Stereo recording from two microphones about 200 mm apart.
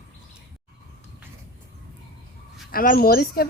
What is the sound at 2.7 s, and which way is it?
Speech, 45° left (ahead or behind).